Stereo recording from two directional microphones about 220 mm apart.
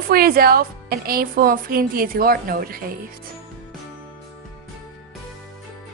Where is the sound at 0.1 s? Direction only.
45° right (ahead or behind).